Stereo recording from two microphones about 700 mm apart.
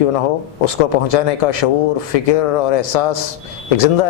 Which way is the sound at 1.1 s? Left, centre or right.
Left.